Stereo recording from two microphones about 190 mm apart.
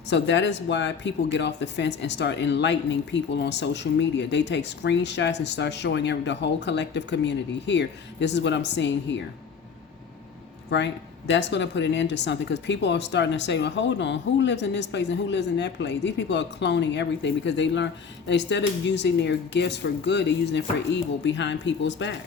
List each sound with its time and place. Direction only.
0.1 s speech: 65° left (ahead or behind)
10.7 s speech: 70° left (ahead or behind)